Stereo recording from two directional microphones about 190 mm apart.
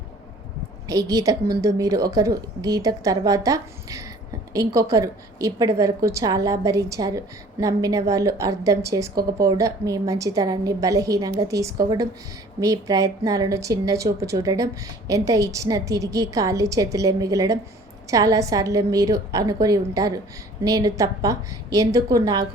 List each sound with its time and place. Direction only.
0.9 s a woman's voice: 15° right (ahead or behind)